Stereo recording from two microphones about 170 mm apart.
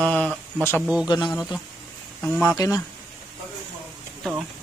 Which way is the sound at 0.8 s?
5° right (ahead or behind).